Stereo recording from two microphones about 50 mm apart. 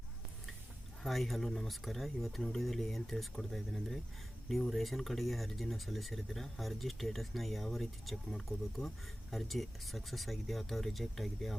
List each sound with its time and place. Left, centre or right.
1.0 s speech: centre